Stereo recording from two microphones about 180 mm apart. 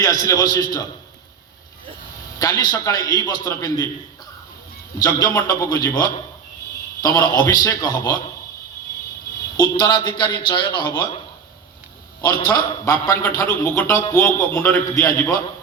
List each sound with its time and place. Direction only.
0.0 s a man's voice: 20° left (ahead or behind)
2.4 s a man's voice: 20° left (ahead or behind)
4.9 s a man's voice: 15° left (ahead or behind)
7.0 s a man's voice: 20° left (ahead or behind)
9.6 s a man's voice: 20° left (ahead or behind)
12.2 s a man's voice: 20° left (ahead or behind)